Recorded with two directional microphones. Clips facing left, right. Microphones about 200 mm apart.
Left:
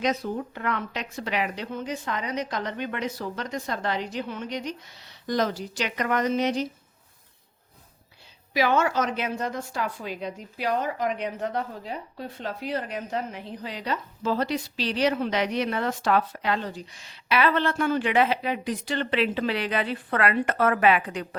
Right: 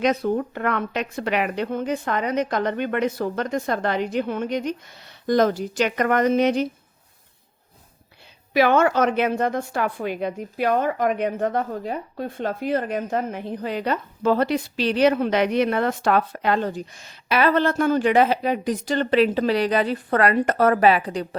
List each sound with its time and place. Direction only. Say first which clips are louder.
0.0 s a woman's voice: right 6 dB; 60° right (ahead or behind)
8.5 s a woman's voice: right 5 dB; 60° right (ahead or behind); by 21.2 s 35° right (ahead or behind)